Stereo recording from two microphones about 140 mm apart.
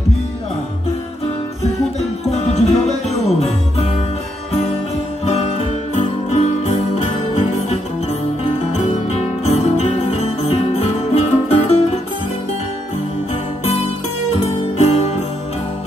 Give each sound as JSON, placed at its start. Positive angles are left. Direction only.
{"t": 2.3, "sound": "music", "side_deg": 50}
{"t": 5.2, "sound": "music", "side_deg": 50}
{"t": 8.7, "sound": "music", "side_deg": 50}
{"t": 14.4, "sound": "music", "side_deg": 50}